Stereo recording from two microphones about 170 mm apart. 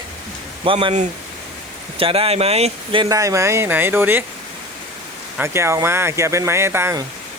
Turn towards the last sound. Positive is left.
turn(degrees=-15)  # may be behind; listen again after turning